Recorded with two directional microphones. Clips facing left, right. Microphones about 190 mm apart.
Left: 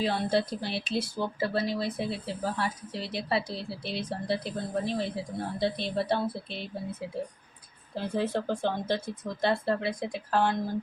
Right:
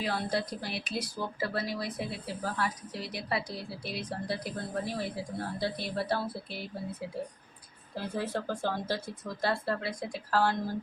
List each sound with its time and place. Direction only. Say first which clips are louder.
0.0 s speech: left 5 dB; 25° left (ahead or behind)
7.9 s speech: left 4 dB; 25° left (ahead or behind)